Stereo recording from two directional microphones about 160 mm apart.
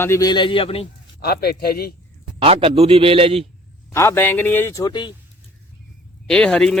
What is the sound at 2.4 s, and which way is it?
A man's voice, 35° right (ahead or behind).